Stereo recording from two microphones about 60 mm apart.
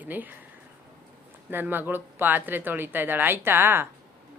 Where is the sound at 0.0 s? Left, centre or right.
Right.